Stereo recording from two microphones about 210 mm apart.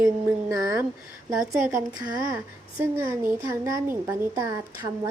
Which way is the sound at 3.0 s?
10° right (ahead or behind).